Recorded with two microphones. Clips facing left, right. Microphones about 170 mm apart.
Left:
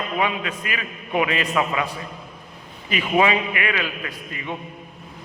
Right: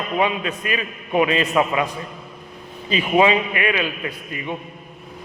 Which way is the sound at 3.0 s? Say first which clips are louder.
Right 3 dB; 25° right (ahead or behind).